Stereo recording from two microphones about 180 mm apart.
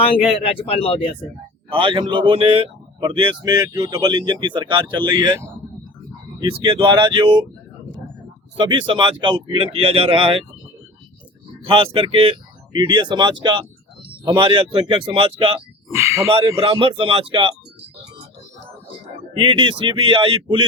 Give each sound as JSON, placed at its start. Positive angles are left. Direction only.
{"t": 0.4, "sound": "speech", "side_deg": 30}
{"t": 1.7, "sound": "speech", "side_deg": -30}
{"t": 6.6, "sound": "speech", "side_deg": -30}
{"t": 8.5, "sound": "speech", "side_deg": -25}
{"t": 11.7, "sound": "speech", "side_deg": -30}
{"t": 15.9, "sound": "speech", "side_deg": -15}
{"t": 16.6, "sound": "speech", "side_deg": -30}
{"t": 19.3, "sound": "speech", "side_deg": -25}